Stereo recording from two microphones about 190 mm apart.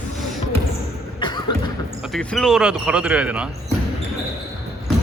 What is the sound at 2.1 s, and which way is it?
Speech, centre (ahead or behind).